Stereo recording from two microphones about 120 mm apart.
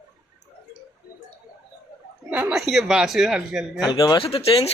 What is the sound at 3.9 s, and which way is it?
Speech, 35° left (ahead or behind).